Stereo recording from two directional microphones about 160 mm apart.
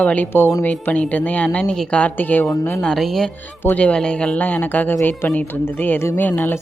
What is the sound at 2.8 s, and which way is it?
Speech, 5° left (ahead or behind).